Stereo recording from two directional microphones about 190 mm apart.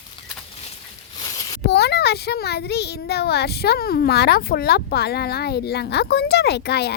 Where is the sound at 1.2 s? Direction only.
20° left (ahead or behind).